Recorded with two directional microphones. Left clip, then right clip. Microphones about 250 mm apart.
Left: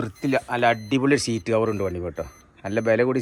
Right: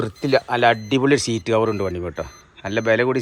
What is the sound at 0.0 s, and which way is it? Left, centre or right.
Speech, centre.